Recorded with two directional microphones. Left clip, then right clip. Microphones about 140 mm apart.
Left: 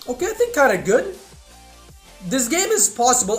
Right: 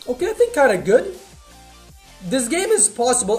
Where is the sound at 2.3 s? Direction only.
15° right (ahead or behind).